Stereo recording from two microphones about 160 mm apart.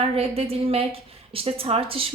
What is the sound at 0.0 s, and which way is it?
A woman's voice, 40° right (ahead or behind).